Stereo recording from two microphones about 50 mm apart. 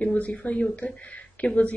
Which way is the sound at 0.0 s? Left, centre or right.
Left.